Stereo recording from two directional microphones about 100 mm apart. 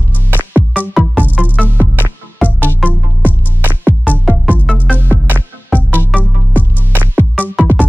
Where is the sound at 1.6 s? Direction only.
20° right (ahead or behind).